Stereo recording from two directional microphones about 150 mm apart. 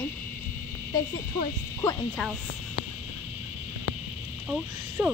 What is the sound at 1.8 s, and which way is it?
Speech, 20° left (ahead or behind).